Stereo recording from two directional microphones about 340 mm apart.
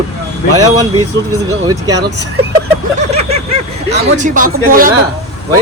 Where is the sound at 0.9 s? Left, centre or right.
Right.